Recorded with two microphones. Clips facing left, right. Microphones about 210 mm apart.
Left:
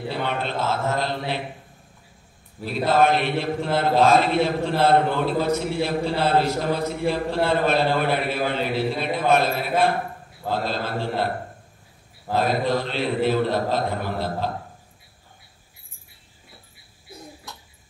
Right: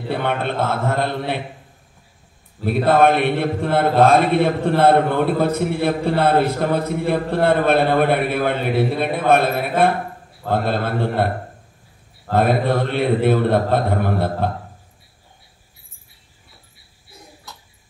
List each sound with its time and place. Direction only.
0.1 s a man's voice: 55° right (ahead or behind)
2.6 s a man's voice: 55° right (ahead or behind)
12.3 s a man's voice: 55° right (ahead or behind)